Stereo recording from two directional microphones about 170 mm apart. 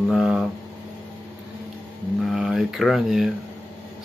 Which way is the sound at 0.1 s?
Centre (ahead or behind).